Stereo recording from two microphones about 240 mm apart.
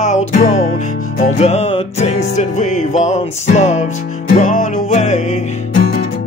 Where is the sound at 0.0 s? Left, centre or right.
Left.